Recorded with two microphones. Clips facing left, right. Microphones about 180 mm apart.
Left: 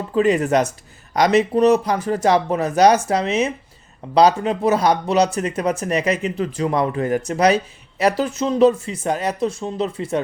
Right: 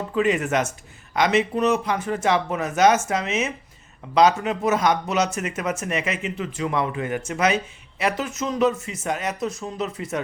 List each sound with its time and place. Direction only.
0.1 s speech: 35° left (ahead or behind)